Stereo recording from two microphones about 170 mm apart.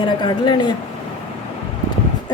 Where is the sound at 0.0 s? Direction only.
30° left (ahead or behind).